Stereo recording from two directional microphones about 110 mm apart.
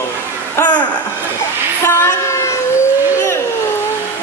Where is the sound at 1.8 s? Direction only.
25° left (ahead or behind).